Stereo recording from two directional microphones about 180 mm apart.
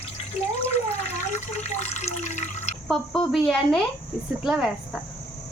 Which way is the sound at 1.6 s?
40° left (ahead or behind).